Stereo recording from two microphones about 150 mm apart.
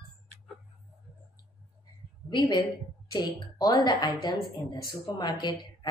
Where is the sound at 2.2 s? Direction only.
30° left (ahead or behind).